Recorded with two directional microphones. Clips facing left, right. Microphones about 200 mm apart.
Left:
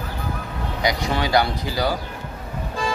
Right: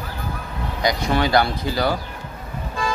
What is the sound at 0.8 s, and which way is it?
Speech, 15° left (ahead or behind).